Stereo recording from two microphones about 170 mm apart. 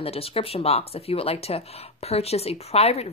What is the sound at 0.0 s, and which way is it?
Speech, 35° left (ahead or behind).